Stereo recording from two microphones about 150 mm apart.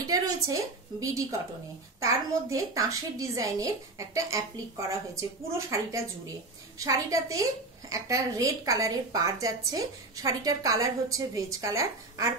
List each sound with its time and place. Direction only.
0.0 s a woman's voice: 25° right (ahead or behind)